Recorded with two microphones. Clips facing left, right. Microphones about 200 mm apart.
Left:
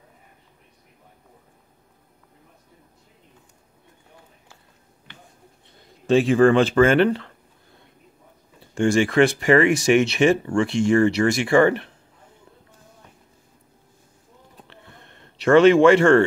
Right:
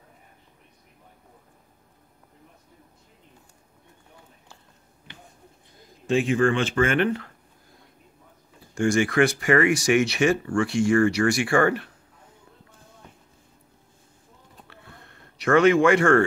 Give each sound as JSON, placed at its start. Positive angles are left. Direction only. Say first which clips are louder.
{"t": 6.1, "sound": "speech", "louder": "left 6 dB", "side_deg": 30}
{"t": 8.5, "sound": "speech", "louder": "left 3 dB", "side_deg": 25}
{"t": 14.7, "sound": "a sound", "louder": "left 1 dB", "side_deg": 25}